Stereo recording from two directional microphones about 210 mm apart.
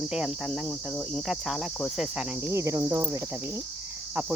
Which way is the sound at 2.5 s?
15° right (ahead or behind).